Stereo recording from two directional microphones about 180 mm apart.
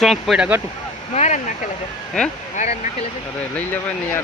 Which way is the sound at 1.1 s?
40° left (ahead or behind).